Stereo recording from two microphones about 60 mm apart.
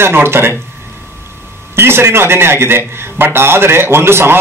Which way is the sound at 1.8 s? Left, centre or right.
Right.